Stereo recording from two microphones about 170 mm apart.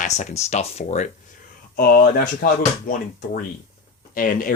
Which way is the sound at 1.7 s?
60° left (ahead or behind).